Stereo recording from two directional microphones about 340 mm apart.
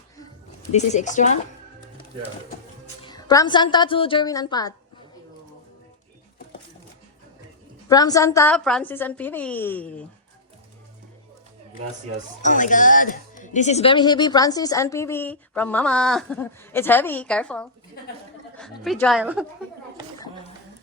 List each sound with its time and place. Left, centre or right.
0.7 s speech: centre
3.1 s speech: centre
7.9 s a woman's voice: centre
12.4 s a woman's voice: left; by 19.5 s centre
20.1 s a sound: centre